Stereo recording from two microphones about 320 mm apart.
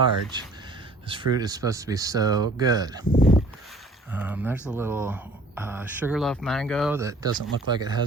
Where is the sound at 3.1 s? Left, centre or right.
Left.